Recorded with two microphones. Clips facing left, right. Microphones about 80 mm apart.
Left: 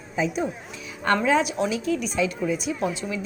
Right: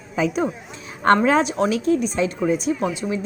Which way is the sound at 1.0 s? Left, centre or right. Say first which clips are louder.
Right 5 dB; right.